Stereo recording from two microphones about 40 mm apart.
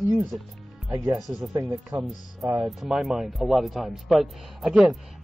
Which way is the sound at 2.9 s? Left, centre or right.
Centre.